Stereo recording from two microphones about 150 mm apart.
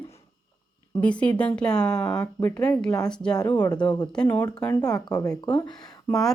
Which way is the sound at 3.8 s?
25° left (ahead or behind).